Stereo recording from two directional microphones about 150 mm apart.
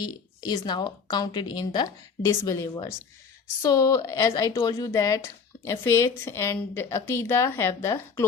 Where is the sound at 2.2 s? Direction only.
20° left (ahead or behind).